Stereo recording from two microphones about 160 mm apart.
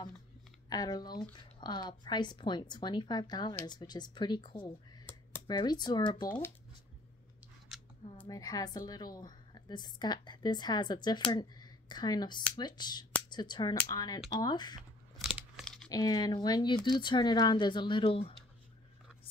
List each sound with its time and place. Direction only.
0.7 s a woman's voice: 25° left (ahead or behind)
7.7 s scissors: 5° right (ahead or behind)
8.3 s a woman's voice: 20° left (ahead or behind)
14.8 s crunch: 5° right (ahead or behind)
15.9 s a woman's voice: 25° left (ahead or behind)